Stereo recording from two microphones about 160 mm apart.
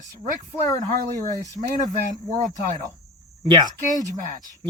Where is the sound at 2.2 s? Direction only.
50° right (ahead or behind).